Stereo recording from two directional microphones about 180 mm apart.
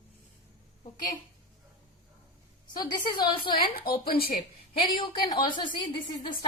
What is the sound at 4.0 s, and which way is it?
Speech, 60° left (ahead or behind).